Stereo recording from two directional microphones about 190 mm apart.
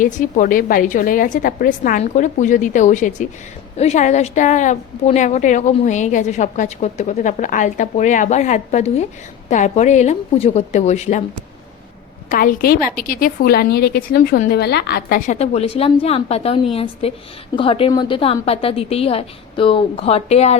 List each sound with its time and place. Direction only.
0.0 s a woman's voice: 45° left (ahead or behind)
12.3 s a woman's voice: 45° left (ahead or behind)
15.3 s a woman's voice: 35° left (ahead or behind)